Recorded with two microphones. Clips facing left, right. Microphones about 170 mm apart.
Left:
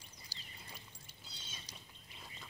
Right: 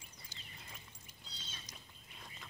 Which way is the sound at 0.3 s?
35° left (ahead or behind).